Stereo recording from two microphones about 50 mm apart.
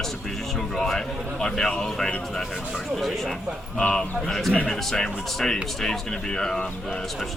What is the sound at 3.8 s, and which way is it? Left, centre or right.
Speech, centre.